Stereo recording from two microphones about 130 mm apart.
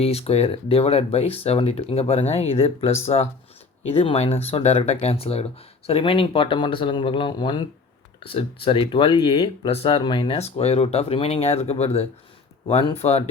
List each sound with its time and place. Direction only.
0.0 s speech: 50° left (ahead or behind)
10.3 s speech: 55° left (ahead or behind)